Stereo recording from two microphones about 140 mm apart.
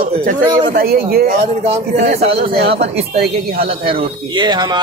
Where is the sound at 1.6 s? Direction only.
50° right (ahead or behind).